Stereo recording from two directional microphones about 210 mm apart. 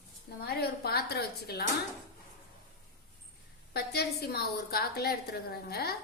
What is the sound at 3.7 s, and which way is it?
A woman's voice, 50° left (ahead or behind).